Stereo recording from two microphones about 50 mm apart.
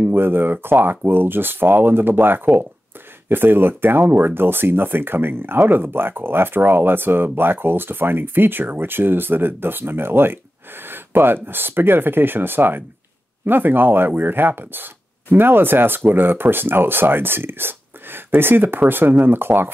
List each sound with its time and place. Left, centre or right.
0.1 s speech: right